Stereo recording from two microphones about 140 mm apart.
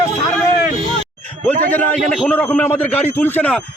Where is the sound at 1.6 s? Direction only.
10° left (ahead or behind).